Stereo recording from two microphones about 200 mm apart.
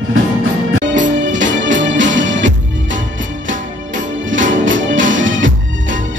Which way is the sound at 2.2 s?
70° right (ahead or behind).